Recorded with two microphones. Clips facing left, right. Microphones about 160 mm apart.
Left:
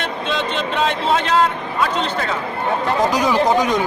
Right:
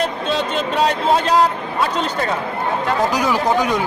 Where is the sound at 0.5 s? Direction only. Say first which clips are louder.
Right 2 dB; 40° right (ahead or behind).